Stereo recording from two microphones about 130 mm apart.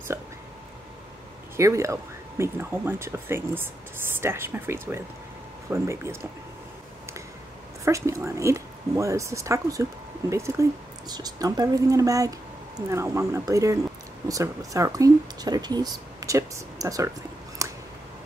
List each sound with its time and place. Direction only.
1.6 s speech: 25° right (ahead or behind)
7.8 s speech: 25° right (ahead or behind)
17.6 s a sound: 25° right (ahead or behind)